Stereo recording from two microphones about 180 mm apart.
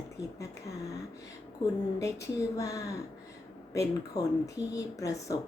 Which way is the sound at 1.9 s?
15° left (ahead or behind).